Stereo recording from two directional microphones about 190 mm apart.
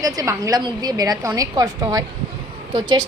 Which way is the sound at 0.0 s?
20° right (ahead or behind).